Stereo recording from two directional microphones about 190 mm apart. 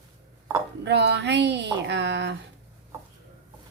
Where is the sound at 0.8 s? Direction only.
65° right (ahead or behind).